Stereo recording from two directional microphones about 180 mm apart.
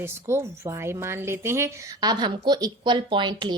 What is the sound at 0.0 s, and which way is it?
Speech, 15° right (ahead or behind).